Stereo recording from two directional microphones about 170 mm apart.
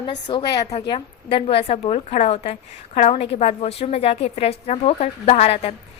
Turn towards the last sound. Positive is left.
turn(degrees=40)  # may be behind; listen again after turning